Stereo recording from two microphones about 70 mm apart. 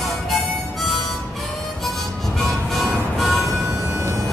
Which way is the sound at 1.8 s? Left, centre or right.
Centre.